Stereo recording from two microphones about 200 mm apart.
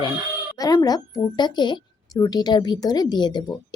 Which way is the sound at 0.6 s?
15° left (ahead or behind).